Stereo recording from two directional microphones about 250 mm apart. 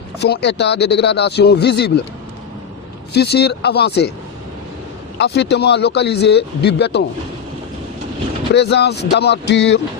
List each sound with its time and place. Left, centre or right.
0.2 s speech: left
3.1 s speech: left
5.1 s speech: left
8.5 s speech: left